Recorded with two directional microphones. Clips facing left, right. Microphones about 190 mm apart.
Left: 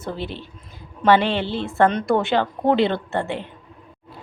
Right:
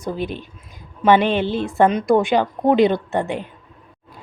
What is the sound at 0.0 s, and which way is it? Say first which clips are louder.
Speech: right 4 dB; 15° right (ahead or behind).